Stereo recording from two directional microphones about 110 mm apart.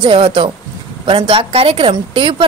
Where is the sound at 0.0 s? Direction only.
55° right (ahead or behind).